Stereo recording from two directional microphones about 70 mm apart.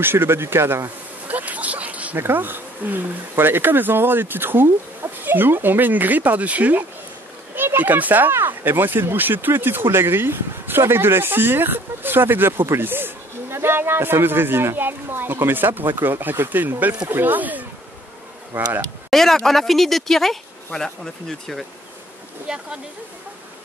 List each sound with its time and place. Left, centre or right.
0.0 s a sound: right
2.1 s speech: right
19.0 s speech: centre
22.5 s speech: centre